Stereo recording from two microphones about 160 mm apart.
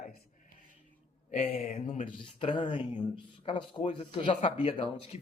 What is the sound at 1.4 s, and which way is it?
Speech, 60° left (ahead or behind).